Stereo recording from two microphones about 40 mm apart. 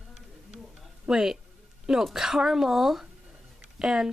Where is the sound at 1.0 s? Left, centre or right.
Centre.